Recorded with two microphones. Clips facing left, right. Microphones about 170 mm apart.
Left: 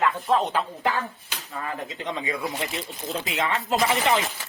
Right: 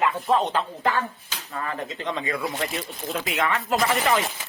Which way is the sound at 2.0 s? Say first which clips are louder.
Right 1 dB; 20° left (ahead or behind).